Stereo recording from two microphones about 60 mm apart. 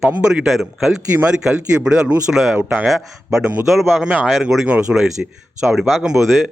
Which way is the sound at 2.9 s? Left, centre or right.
Centre.